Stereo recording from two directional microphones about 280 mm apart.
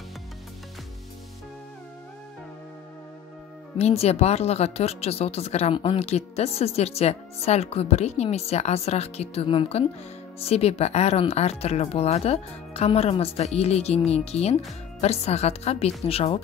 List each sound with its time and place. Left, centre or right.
3.7 s a woman's voice: left